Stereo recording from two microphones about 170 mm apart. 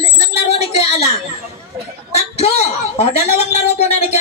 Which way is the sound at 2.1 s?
40° left (ahead or behind).